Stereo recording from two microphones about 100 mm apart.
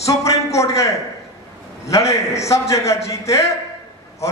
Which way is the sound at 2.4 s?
30° left (ahead or behind).